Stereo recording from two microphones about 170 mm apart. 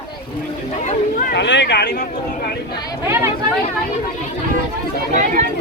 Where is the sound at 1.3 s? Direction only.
90° left.